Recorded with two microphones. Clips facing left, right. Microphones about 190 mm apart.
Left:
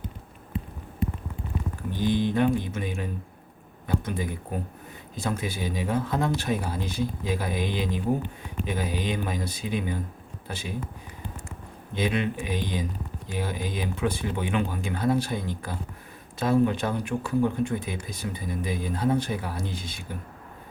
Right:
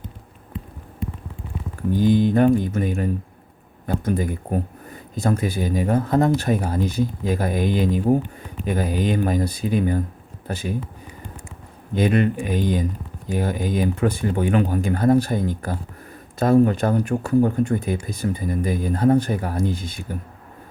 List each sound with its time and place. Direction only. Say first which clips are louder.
2.0 s speech: right 7 dB; 45° right (ahead or behind)
11.9 s speech: right 7 dB; 45° right (ahead or behind)